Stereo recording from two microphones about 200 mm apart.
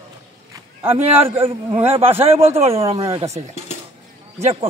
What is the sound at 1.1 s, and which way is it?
Speech, 10° right (ahead or behind).